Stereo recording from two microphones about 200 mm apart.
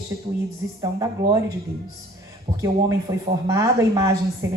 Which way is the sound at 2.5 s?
25° right (ahead or behind).